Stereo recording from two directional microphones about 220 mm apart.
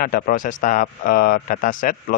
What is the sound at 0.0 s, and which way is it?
Speech, 40° left (ahead or behind).